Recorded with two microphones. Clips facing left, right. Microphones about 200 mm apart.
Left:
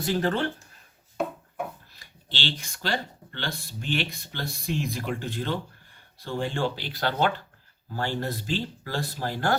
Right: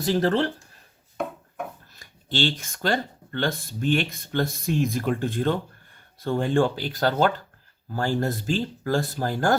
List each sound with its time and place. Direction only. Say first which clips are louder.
0.0 s speech: right 4 dB; 40° right (ahead or behind)
1.9 s speech: right 11 dB; 45° right (ahead or behind)